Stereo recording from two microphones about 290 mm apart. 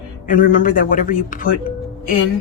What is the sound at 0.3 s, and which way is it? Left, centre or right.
Speech, left.